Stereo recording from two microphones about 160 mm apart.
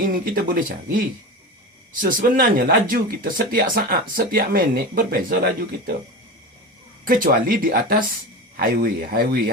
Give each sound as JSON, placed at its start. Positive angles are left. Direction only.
{"t": 0.0, "sound": "speech", "side_deg": -60}
{"t": 7.0, "sound": "speech", "side_deg": -60}